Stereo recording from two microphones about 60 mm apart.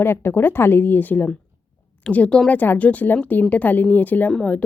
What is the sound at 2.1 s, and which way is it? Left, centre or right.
Speech, centre.